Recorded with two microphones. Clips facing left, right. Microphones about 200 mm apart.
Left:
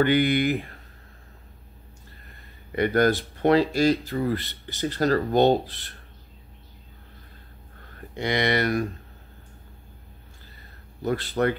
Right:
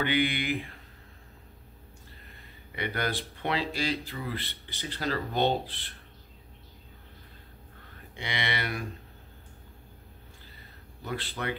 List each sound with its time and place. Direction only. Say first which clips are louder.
0.0 s speech: left 8 dB; 40° left (ahead or behind)
2.7 s speech: left 11 dB; 45° left (ahead or behind)
8.2 s speech: left 10 dB; 45° left (ahead or behind)
11.1 s speech: left 10 dB; 45° left (ahead or behind)